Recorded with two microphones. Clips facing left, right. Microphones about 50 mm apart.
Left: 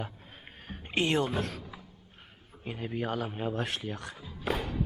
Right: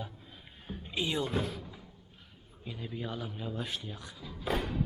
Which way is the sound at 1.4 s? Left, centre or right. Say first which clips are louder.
Left 1 dB; left.